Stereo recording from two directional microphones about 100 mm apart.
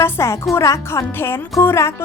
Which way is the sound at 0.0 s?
30° left (ahead or behind).